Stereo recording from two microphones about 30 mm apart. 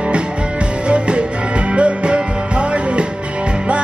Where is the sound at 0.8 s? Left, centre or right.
Right.